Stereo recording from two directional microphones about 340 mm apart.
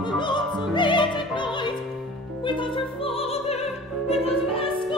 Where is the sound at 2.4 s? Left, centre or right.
Centre.